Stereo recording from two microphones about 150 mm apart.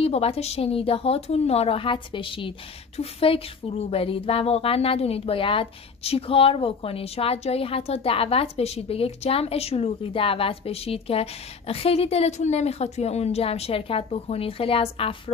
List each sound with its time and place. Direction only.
0.0 s speech: 40° left (ahead or behind)